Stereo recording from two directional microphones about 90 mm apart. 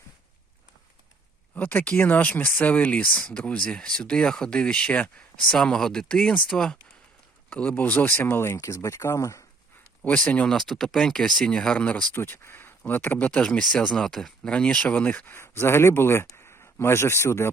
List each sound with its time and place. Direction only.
1.5 s speech: 15° left (ahead or behind); by 9.4 s 35° left (ahead or behind)
10.0 s speech: 15° left (ahead or behind)
12.1 s speech: 25° left (ahead or behind)